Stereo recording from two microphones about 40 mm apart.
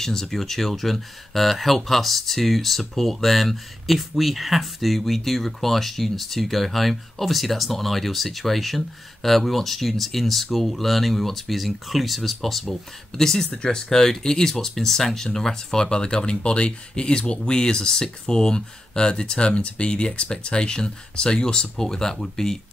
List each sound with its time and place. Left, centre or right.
0.0 s speech: centre